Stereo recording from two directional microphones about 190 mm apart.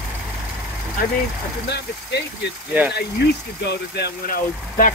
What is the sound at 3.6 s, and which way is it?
Speech, 60° left (ahead or behind).